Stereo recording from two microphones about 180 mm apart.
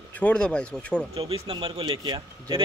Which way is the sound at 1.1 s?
35° right (ahead or behind).